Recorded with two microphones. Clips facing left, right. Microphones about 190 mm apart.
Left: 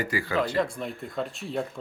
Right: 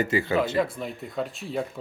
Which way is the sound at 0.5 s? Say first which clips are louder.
Right 1 dB; 5° right (ahead or behind).